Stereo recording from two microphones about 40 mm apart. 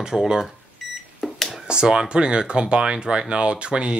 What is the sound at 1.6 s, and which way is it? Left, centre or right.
Speech, right.